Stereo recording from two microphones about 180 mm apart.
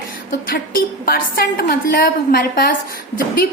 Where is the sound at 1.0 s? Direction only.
55° left (ahead or behind).